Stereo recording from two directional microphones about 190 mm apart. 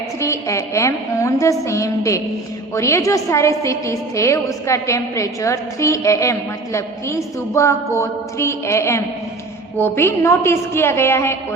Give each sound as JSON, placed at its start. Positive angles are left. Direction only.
{"t": 0.2, "sound": "a woman's voice", "side_deg": 15}